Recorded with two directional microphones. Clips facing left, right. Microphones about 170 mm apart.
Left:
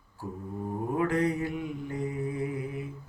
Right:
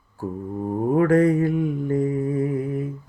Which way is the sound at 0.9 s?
50° right (ahead or behind).